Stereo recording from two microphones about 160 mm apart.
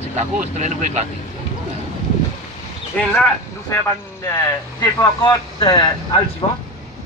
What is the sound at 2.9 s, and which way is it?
Speech, 5° left (ahead or behind).